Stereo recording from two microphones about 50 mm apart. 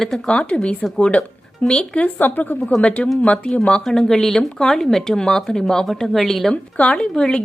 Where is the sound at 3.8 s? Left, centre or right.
Centre.